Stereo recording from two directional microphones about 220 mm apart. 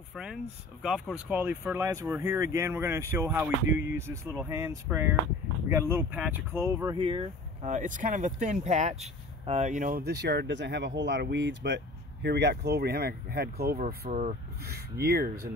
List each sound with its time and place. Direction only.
0.1 s speech: 5° right (ahead or behind); by 15.5 s 45° right (ahead or behind)